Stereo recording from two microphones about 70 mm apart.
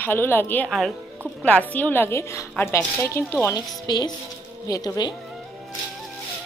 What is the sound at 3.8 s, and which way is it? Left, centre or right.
Speech, left.